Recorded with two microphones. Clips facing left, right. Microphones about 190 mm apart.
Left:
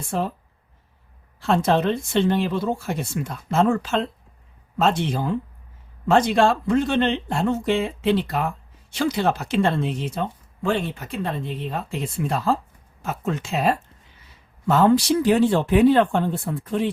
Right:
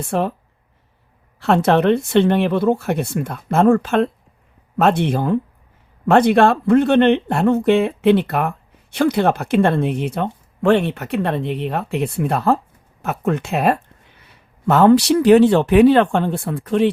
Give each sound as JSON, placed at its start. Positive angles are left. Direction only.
{"t": 0.0, "sound": "speech", "side_deg": -65}
{"t": 1.4, "sound": "speech", "side_deg": -65}